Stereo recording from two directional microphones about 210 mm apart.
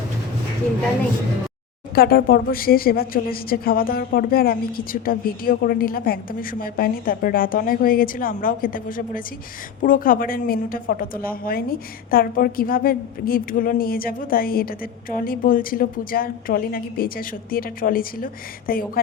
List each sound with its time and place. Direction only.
2.0 s a woman's voice: 45° left (ahead or behind)